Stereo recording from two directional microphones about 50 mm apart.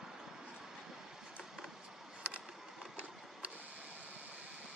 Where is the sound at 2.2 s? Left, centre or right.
Right.